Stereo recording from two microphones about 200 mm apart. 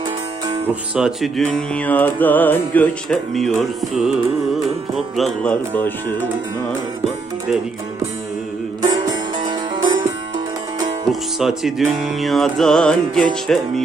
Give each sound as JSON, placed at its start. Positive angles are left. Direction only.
{"t": 0.9, "sound": "music", "side_deg": 0}
{"t": 8.8, "sound": "music", "side_deg": -20}
{"t": 11.1, "sound": "music", "side_deg": 0}